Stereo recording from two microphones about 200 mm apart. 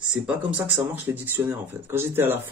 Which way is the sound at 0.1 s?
5° right (ahead or behind).